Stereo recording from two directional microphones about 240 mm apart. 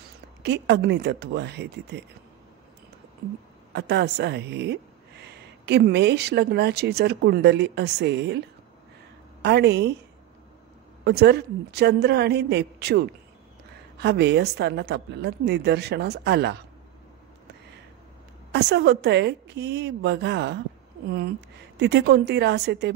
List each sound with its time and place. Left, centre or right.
0.4 s a woman's voice: right
3.7 s a woman's voice: right
11.1 s a woman's voice: right
18.5 s a woman's voice: right
21.7 s a woman's voice: right